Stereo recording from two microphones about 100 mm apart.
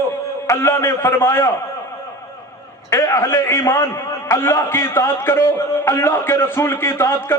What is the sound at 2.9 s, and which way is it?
A man's voice, 30° left (ahead or behind).